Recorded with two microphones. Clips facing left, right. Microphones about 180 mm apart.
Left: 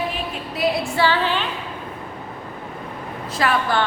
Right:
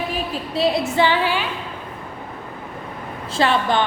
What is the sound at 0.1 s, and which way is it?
A woman's voice, 30° right (ahead or behind).